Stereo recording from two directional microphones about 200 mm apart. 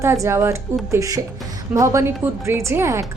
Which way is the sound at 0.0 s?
15° right (ahead or behind).